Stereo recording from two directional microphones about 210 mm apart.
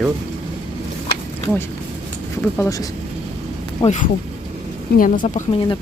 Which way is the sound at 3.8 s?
35° left (ahead or behind).